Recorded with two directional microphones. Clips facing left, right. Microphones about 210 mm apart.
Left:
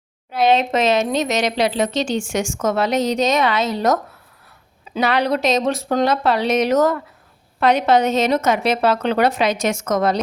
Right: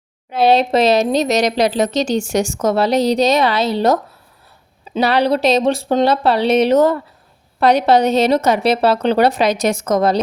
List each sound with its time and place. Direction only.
0.3 s speech: 35° right (ahead or behind)